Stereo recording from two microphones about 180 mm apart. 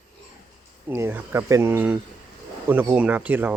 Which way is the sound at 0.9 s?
15° right (ahead or behind).